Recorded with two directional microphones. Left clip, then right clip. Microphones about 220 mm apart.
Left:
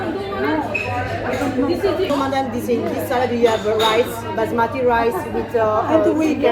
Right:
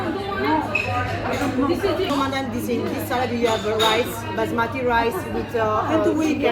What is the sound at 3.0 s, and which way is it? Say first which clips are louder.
Speech: left 5 dB; 25° right (ahead or behind).